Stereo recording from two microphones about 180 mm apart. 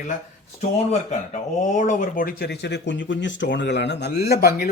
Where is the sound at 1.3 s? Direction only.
45° left (ahead or behind).